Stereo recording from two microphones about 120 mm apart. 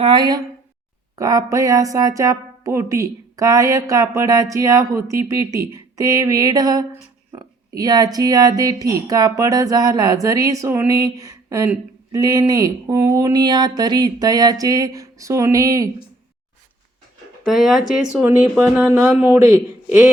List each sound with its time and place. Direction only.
0.0 s speech: 40° right (ahead or behind)
17.4 s speech: centre (ahead or behind)
18.5 s speech: 20° right (ahead or behind)